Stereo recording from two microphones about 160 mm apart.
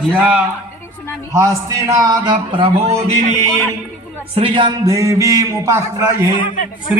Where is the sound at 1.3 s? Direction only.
20° right (ahead or behind).